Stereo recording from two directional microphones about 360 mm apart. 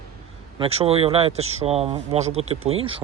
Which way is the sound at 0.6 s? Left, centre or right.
Centre.